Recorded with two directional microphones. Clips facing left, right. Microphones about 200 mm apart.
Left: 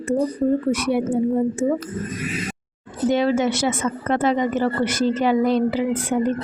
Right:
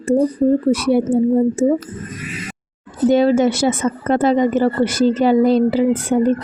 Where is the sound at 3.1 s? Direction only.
35° right (ahead or behind).